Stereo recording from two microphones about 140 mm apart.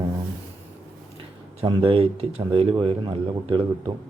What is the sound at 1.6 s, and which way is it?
Speech, 35° right (ahead or behind).